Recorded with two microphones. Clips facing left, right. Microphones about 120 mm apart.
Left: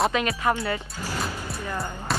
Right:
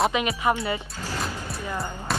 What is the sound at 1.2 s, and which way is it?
Music, centre (ahead or behind).